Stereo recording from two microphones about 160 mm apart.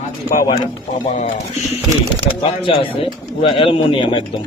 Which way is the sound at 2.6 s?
35° left (ahead or behind).